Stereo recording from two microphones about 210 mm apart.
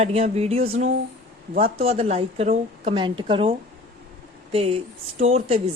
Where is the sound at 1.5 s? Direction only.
45° right (ahead or behind).